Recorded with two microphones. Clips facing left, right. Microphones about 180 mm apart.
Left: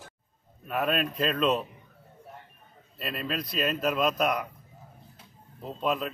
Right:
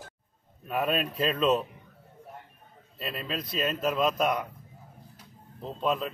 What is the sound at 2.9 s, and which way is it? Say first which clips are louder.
A man's voice: left 2 dB; centre (ahead or behind).